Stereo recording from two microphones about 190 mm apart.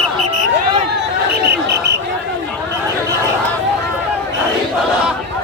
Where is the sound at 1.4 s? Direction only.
60° right (ahead or behind).